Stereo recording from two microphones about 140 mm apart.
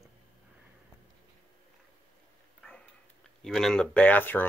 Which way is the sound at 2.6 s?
5° left (ahead or behind).